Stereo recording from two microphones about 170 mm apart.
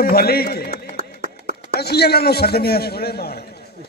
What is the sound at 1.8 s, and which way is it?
A man's voice, 70° left (ahead or behind).